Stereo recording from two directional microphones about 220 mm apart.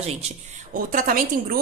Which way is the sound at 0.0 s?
30° right (ahead or behind).